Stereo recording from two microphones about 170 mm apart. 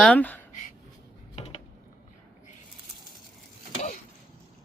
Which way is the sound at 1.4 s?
40° left (ahead or behind).